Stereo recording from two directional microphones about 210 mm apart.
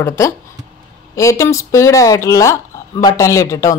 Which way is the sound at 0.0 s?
15° left (ahead or behind).